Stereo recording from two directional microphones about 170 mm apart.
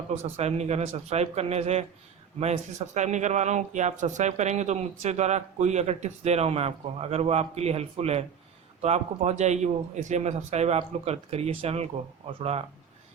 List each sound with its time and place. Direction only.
0.1 s speech: 40° right (ahead or behind)